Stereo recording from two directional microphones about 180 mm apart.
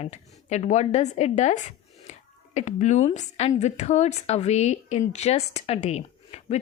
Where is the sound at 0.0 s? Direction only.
40° left (ahead or behind).